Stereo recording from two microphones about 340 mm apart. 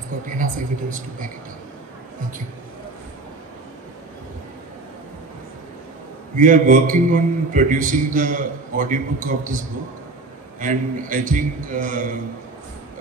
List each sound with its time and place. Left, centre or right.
0.4 s a man's voice: right
6.3 s a man's voice: right